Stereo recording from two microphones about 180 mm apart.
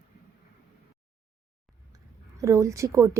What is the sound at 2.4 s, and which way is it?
Speech, 15° right (ahead or behind).